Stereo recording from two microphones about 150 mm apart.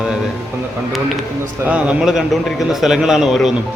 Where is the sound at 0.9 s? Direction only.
Centre (ahead or behind).